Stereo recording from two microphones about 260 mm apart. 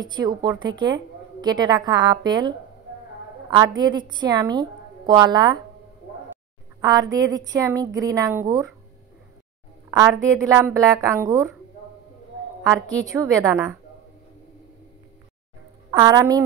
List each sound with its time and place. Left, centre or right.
0.0 s a woman's voice: centre
6.8 s a woman's voice: centre
9.8 s a woman's voice: centre
12.6 s a woman's voice: centre
15.9 s a woman's voice: centre